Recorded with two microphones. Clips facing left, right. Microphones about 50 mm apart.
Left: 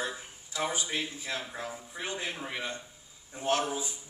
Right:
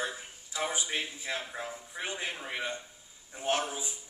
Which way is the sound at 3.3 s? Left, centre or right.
Centre.